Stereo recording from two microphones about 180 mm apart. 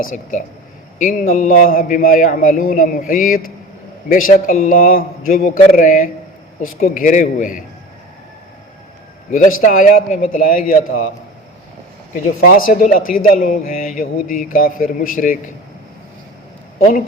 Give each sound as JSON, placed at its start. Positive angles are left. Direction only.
{"t": 0.0, "sound": "a man's voice", "side_deg": 45}
{"t": 9.3, "sound": "a man's voice", "side_deg": 50}
{"t": 12.4, "sound": "a man's voice", "side_deg": 50}